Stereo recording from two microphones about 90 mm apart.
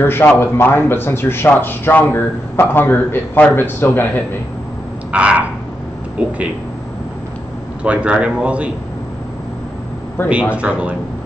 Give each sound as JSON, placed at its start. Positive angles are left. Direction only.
{"t": 0.0, "sound": "a man's voice", "side_deg": 25}
{"t": 5.1, "sound": "frog", "side_deg": -15}
{"t": 6.1, "sound": "speech", "side_deg": -15}
{"t": 7.8, "sound": "a man's voice", "side_deg": -15}
{"t": 10.2, "sound": "a man's voice", "side_deg": 25}
{"t": 10.5, "sound": "a man's voice", "side_deg": -15}